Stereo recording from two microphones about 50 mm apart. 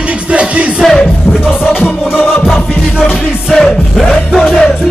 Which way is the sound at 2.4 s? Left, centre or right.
Centre.